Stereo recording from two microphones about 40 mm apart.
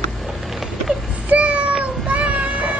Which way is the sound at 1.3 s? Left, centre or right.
Right.